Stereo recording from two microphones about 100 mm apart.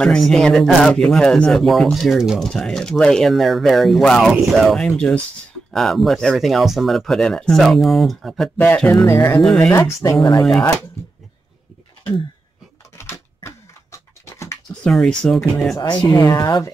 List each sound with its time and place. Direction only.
0.0 s speech: 5° left (ahead or behind)
2.5 s speech: 5° left (ahead or behind)
8.5 s speech: 20° left (ahead or behind)
9.4 s speech: 5° left (ahead or behind)
9.7 s speech: 25° left (ahead or behind)
12.9 s a sound: 25° left (ahead or behind)
14.8 s speech: 5° left (ahead or behind)
16.0 s speech: 20° left (ahead or behind)
16.3 s speech: 40° left (ahead or behind)